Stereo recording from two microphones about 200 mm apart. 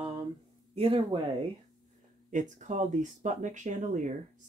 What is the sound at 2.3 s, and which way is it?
Speech, 40° right (ahead or behind).